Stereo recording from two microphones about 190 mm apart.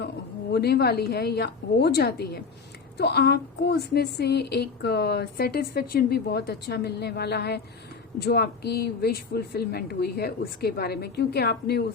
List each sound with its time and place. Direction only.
0.5 s a woman's voice: 55° left (ahead or behind)